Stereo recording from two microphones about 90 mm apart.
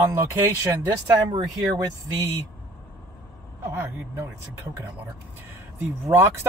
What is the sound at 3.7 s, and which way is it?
Speech, 25° right (ahead or behind).